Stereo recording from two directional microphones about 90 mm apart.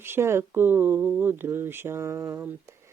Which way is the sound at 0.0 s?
25° right (ahead or behind).